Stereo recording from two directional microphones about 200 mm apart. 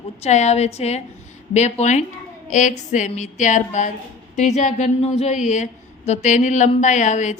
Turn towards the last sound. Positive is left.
turn(degrees=35)  # may be behind; listen again after turning